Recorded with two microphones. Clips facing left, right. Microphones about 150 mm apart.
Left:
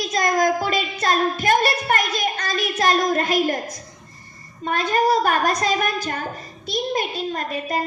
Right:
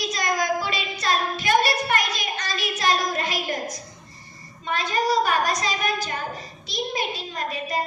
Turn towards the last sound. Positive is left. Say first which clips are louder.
# left 4 dB
turn(degrees=50)  # may be behind; listen again after turning